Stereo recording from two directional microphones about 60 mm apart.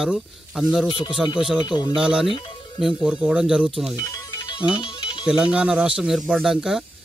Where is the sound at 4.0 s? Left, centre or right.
Left.